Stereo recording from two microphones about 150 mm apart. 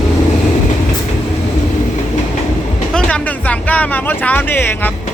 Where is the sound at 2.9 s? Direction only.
10° left (ahead or behind).